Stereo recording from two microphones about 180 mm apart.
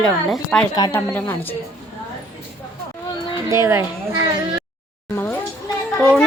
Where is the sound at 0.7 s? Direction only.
20° left (ahead or behind).